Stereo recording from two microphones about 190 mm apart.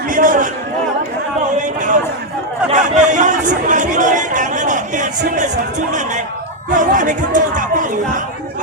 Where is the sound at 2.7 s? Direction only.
40° right (ahead or behind).